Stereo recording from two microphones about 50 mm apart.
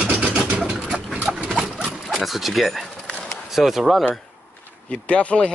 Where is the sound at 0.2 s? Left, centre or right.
Right.